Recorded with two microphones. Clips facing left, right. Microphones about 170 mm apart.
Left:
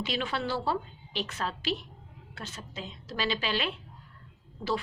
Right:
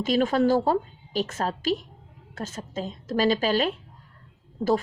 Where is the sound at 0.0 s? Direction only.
45° right (ahead or behind).